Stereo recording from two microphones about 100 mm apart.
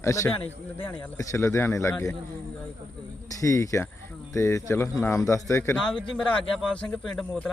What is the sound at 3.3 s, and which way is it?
A man's voice, 30° left (ahead or behind).